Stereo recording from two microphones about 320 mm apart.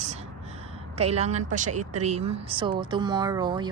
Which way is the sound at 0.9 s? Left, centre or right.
Centre.